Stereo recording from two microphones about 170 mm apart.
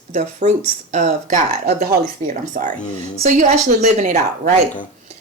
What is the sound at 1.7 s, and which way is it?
Speech, 60° right (ahead or behind).